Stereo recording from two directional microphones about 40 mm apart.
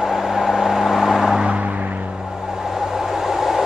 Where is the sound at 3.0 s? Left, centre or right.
Centre.